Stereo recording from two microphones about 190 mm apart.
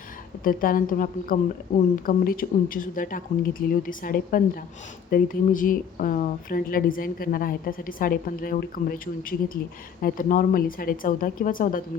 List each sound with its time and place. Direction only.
0.4 s speech: 45° left (ahead or behind)
10.0 s speech: 45° left (ahead or behind)